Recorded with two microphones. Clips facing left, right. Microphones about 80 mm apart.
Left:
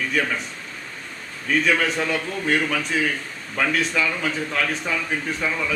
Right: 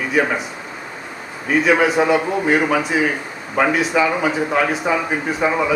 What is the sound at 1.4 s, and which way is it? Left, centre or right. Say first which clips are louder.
A man's voice: right 6 dB; centre.